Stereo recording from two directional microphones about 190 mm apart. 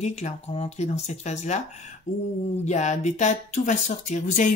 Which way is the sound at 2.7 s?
40° left (ahead or behind).